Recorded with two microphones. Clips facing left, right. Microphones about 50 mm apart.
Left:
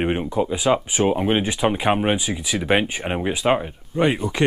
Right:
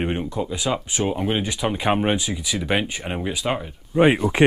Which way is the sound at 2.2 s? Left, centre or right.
Centre.